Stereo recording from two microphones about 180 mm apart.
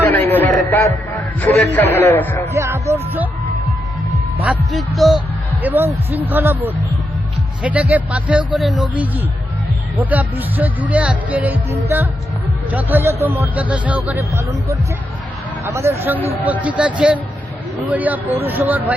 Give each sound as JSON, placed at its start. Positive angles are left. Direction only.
{"t": 0.0, "sound": "a sound", "side_deg": 10}
{"t": 1.4, "sound": "a man's voice", "side_deg": 10}
{"t": 2.5, "sound": "speech", "side_deg": -15}
{"t": 4.4, "sound": "speech", "side_deg": -5}
{"t": 12.7, "sound": "speech", "side_deg": -10}